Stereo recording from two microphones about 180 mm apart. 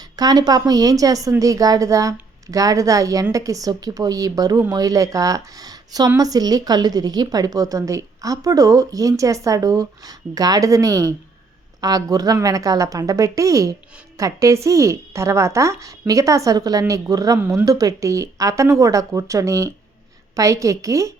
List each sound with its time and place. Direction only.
0.0 s a woman's voice: 20° right (ahead or behind)